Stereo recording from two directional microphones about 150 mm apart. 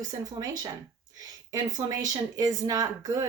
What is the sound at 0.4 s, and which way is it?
Speech, 25° right (ahead or behind).